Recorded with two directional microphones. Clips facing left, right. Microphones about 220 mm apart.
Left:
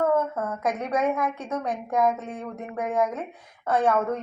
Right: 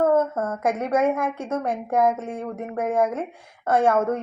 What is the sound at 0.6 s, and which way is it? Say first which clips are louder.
A woman's voice: right 4 dB; 25° right (ahead or behind).